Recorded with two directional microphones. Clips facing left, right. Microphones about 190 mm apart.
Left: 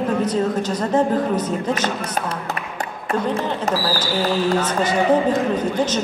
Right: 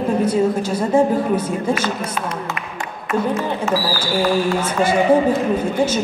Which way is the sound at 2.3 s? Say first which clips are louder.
Right 1 dB; 35° left (ahead or behind).